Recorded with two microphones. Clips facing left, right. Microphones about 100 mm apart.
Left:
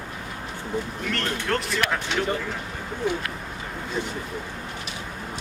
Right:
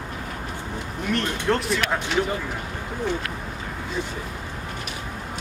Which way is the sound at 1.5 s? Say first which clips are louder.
Right 2 dB; centre (ahead or behind).